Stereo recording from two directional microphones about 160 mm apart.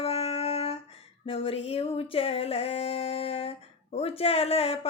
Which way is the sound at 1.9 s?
35° left (ahead or behind).